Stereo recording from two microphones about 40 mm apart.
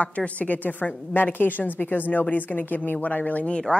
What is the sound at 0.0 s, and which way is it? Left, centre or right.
A woman's voice, left.